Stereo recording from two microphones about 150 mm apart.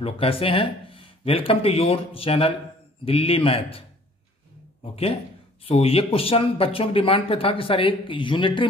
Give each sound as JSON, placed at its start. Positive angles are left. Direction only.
{"t": 0.0, "sound": "speech", "side_deg": 40}
{"t": 4.9, "sound": "speech", "side_deg": 40}